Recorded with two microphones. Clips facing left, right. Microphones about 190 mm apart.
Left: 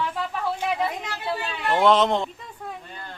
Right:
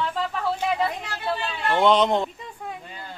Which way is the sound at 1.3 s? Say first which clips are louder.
Even; 10° left (ahead or behind).